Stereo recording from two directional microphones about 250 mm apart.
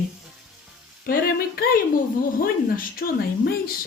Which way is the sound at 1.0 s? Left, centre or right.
Left.